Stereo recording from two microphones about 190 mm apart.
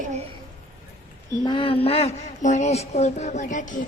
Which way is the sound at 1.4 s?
25° left (ahead or behind).